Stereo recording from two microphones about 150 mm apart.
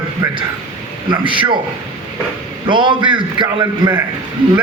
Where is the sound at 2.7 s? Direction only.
30° right (ahead or behind).